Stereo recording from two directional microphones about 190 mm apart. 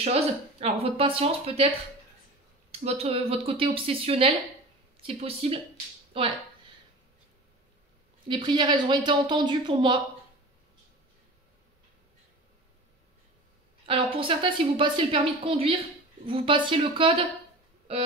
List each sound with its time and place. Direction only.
0.0 s speech: 30° right (ahead or behind)
2.7 s a woman's voice: 30° right (ahead or behind)
8.3 s a woman's voice: 25° right (ahead or behind)
13.8 s a woman's voice: 30° right (ahead or behind)
17.9 s music: 30° right (ahead or behind)